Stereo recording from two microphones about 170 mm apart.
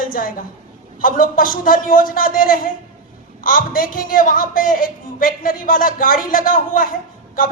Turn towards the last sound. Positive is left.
turn(degrees=55)  # may be behind; listen again after turning